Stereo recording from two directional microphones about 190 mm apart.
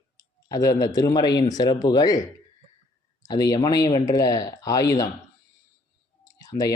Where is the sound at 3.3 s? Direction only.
20° left (ahead or behind).